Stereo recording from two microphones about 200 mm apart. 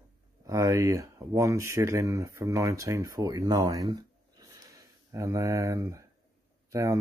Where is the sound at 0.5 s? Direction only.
15° right (ahead or behind).